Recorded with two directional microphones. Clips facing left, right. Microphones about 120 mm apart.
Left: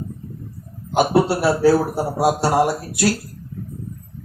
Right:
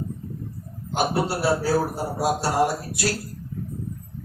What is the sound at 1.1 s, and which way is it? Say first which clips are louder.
Speech: left 5 dB; 75° left (ahead or behind).